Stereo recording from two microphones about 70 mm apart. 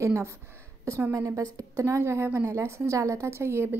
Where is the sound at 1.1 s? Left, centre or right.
Right.